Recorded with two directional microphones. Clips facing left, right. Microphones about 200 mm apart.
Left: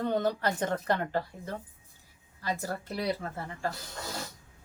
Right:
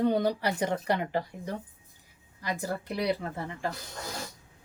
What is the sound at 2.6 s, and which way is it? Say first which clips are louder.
A woman's voice: right 3 dB; 15° right (ahead or behind).